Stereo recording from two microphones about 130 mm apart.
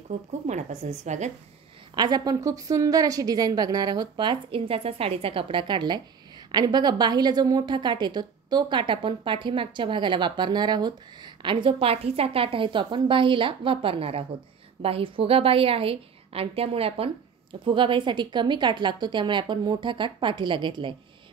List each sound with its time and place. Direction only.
0.1 s a woman's voice: 65° right (ahead or behind)
2.0 s a woman's voice: 30° right (ahead or behind)